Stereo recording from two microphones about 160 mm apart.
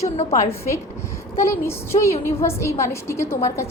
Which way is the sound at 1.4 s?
15° left (ahead or behind).